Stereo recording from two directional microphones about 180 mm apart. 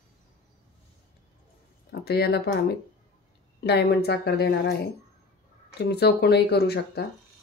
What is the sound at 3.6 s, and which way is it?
Speech, 65° left (ahead or behind).